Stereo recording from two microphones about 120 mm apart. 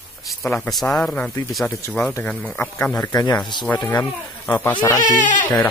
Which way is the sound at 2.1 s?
10° left (ahead or behind).